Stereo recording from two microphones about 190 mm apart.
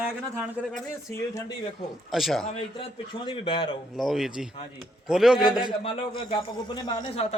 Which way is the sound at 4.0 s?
Centre (ahead or behind).